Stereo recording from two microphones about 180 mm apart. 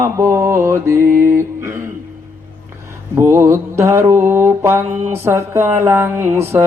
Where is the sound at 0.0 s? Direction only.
15° right (ahead or behind).